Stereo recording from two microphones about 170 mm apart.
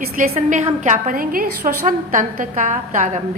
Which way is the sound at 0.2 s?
50° right (ahead or behind).